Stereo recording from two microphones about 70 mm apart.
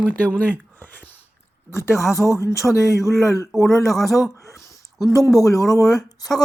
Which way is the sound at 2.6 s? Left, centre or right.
Centre.